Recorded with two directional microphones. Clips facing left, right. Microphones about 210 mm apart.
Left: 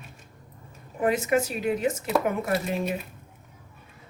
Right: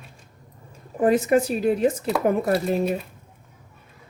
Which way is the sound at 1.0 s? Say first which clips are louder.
Right 5 dB; 35° right (ahead or behind).